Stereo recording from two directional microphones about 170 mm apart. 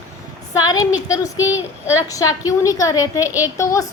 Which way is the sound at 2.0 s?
20° left (ahead or behind).